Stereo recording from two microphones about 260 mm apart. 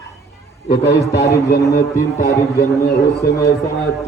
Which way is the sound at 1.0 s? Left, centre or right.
Centre.